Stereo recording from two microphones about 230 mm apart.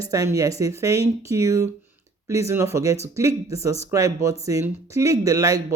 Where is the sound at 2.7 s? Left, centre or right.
Centre.